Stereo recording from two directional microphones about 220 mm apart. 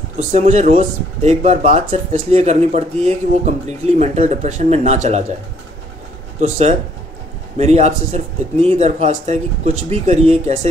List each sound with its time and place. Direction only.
0.2 s speech: 30° right (ahead or behind)
6.4 s speech: 30° right (ahead or behind)